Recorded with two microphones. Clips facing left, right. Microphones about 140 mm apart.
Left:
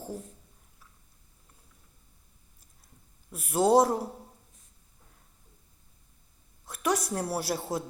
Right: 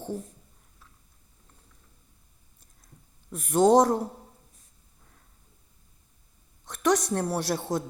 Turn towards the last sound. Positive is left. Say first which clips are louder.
# right 3 dB
turn(degrees=5)  # may be behind; listen again after turning